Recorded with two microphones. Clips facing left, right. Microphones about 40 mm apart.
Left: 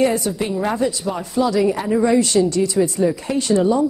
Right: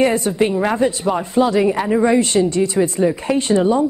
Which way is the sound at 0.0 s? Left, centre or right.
Right.